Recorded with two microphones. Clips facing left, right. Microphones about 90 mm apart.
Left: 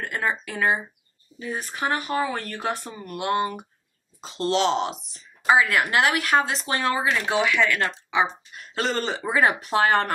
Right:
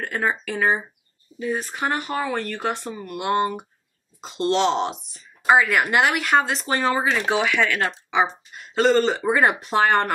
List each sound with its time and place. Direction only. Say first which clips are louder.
0.0 s speech: right 2 dB; centre (ahead or behind)
1.8 s speech: left 4 dB; 5° left (ahead or behind)
3.1 s speech: right 2 dB; 20° right (ahead or behind)
4.3 s speech: right 2 dB; centre (ahead or behind)